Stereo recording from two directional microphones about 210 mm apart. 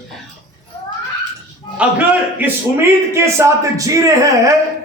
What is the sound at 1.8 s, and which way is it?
A man's voice, 5° right (ahead or behind).